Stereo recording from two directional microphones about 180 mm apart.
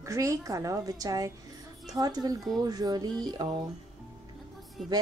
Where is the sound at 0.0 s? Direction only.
15° right (ahead or behind).